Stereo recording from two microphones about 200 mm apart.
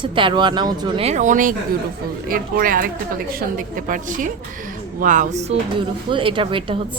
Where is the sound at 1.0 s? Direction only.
35° right (ahead or behind).